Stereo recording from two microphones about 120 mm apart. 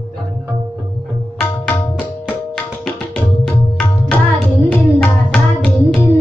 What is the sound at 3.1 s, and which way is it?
Tabla, 5° left (ahead or behind).